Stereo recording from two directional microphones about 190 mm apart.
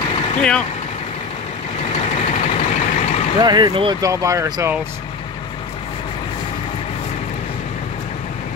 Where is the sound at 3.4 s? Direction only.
20° right (ahead or behind).